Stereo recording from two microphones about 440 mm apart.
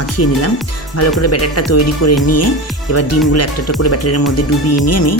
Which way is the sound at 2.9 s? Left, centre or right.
Left.